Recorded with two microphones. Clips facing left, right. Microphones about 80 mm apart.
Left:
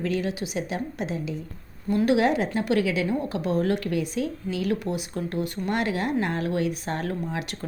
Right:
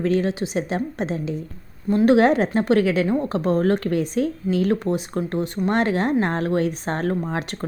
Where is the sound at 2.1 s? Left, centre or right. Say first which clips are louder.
Right 6 dB; right.